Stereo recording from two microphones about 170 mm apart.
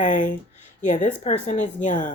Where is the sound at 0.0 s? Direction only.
50° left (ahead or behind).